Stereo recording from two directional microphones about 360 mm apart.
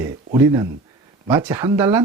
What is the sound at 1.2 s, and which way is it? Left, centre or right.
Speech, centre.